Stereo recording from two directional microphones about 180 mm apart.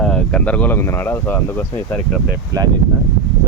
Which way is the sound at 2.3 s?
20° right (ahead or behind).